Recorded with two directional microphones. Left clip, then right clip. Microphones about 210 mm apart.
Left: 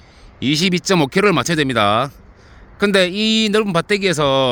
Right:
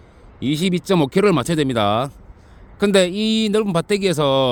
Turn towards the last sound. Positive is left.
turn(degrees=-10)  # may be behind; listen again after turning